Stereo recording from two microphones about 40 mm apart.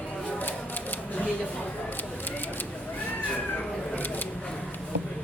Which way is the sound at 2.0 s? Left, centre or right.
Left.